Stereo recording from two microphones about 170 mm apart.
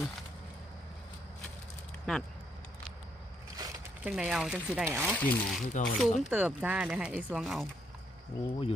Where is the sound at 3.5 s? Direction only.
20° right (ahead or behind).